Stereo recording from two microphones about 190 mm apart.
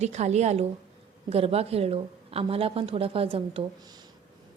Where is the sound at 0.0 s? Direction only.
35° right (ahead or behind).